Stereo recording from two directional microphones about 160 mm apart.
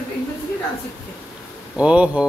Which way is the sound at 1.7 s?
5° right (ahead or behind).